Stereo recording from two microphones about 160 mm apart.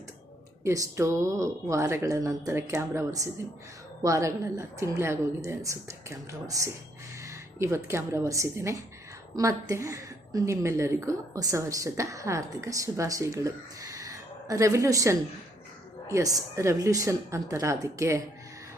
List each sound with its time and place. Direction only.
0.6 s a woman's voice: 20° right (ahead or behind)